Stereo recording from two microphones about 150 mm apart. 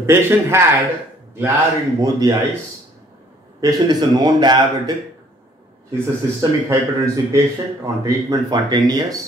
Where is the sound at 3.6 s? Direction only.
25° right (ahead or behind).